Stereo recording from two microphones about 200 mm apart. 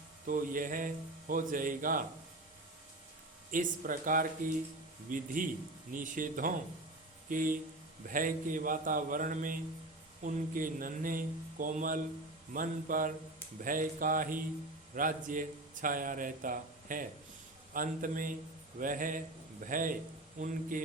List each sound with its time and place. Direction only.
0.3 s a man's voice: 45° right (ahead or behind)
3.5 s a man's voice: 40° right (ahead or behind)